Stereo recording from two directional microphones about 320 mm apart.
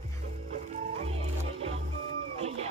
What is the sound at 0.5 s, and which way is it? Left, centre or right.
Music, right.